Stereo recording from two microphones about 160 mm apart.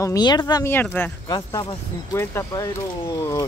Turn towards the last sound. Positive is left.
turn(degrees=25)  # may be behind; listen again after turning